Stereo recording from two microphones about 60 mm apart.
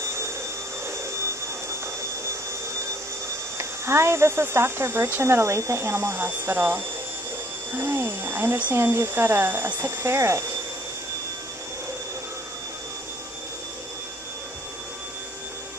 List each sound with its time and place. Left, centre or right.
3.5 s speech: right